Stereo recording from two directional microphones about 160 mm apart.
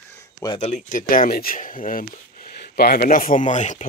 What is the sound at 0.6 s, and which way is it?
Speech, 50° left (ahead or behind).